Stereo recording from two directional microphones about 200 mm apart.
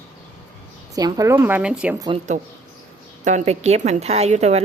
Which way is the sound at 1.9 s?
20° right (ahead or behind).